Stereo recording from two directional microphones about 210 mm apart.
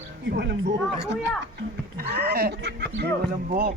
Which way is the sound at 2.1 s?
45° right (ahead or behind).